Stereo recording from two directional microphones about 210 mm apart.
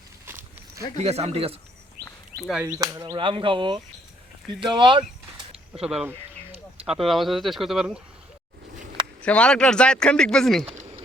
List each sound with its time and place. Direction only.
0.9 s speech: 30° right (ahead or behind)
2.5 s speech: 5° right (ahead or behind); by 5.0 s 25° right (ahead or behind)
5.8 s speech: 5° right (ahead or behind)
9.2 s speech: 5° left (ahead or behind)
10.7 s a sound: 25° right (ahead or behind)